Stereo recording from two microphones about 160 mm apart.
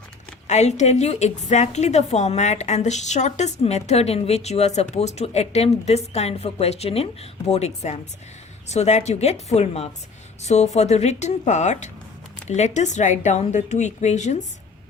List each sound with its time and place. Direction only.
0.4 s a woman's voice: 45° left (ahead or behind)